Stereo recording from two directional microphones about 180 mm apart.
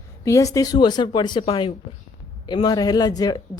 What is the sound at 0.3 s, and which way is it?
Speech, 15° left (ahead or behind).